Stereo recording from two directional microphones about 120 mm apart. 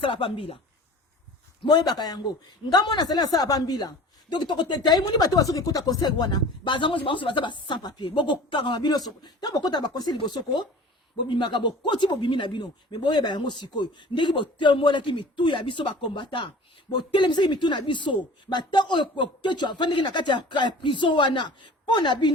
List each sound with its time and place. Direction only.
0.0 s speech: 45° left (ahead or behind)
1.6 s a man's voice: 35° left (ahead or behind)